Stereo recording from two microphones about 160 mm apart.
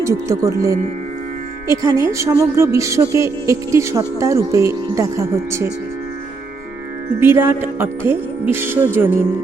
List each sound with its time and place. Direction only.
0.0 s a woman's voice: 20° right (ahead or behind)
7.2 s speech: 15° right (ahead or behind)